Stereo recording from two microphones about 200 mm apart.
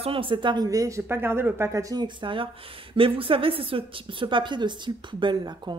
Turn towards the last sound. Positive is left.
turn(degrees=-20)  # may be behind; listen again after turning